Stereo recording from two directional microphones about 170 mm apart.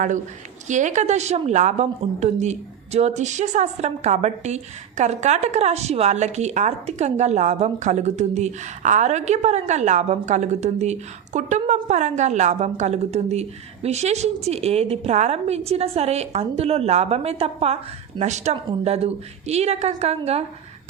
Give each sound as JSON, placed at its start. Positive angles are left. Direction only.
{"t": 0.7, "sound": "a woman's voice", "side_deg": -45}